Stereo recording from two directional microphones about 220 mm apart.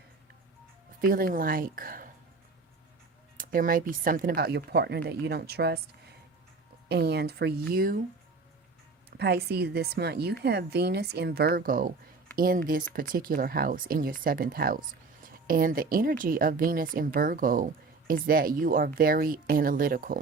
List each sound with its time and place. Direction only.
1.0 s speech: 40° right (ahead or behind)
3.3 s speech: 40° right (ahead or behind)
6.8 s speech: 45° right (ahead or behind)
9.0 s speech: 45° right (ahead or behind)